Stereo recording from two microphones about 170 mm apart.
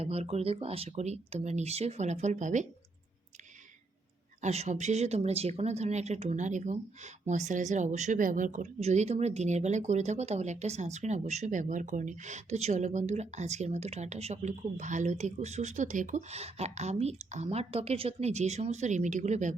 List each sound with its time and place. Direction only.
0.0 s speech: 35° right (ahead or behind)
4.4 s speech: 40° right (ahead or behind)